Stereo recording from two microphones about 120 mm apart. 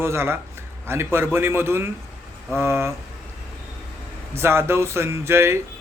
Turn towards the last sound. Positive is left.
turn(degrees=-20)  # may be behind; listen again after turning